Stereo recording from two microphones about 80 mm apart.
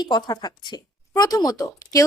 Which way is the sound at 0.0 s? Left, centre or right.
Left.